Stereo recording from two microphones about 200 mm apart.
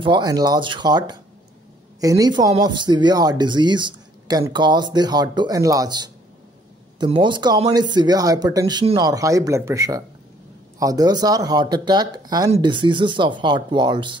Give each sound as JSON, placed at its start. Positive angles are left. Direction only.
{"t": 0.0, "sound": "a woman's voice", "side_deg": -20}